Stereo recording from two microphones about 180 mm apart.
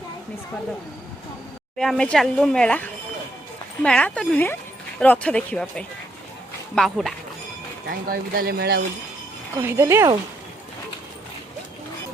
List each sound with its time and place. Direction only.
1.8 s speech: 5° left (ahead or behind)
7.9 s speech: 55° right (ahead or behind)
9.6 s speech: 15° right (ahead or behind)